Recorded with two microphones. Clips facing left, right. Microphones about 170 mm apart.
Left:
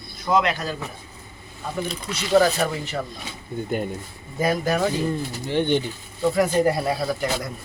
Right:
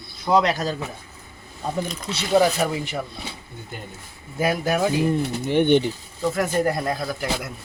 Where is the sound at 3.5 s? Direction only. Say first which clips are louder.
Left 11 dB; 50° left (ahead or behind).